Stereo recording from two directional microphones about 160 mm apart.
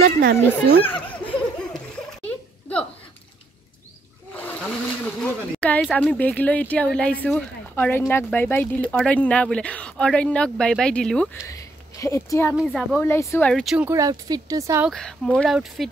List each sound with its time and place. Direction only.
0.0 s speech: 85° right
1.1 s laughter: 10° left (ahead or behind)
2.2 s a sound: 5° left (ahead or behind)
4.4 s a sound: 10° left (ahead or behind)
5.8 s speech: 5° left (ahead or behind)
11.4 s speech: 20° left (ahead or behind)
12.5 s speech: 5° right (ahead or behind)
13.0 s speech: 15° left (ahead or behind)
13.5 s speech: 5° left (ahead or behind)
13.7 s speech: 15° right (ahead or behind)
14.9 s speech: 5° left (ahead or behind)